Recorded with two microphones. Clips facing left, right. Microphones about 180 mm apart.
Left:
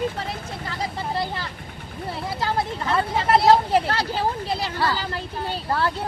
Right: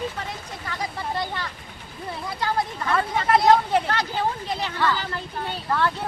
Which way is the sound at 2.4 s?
25° left (ahead or behind).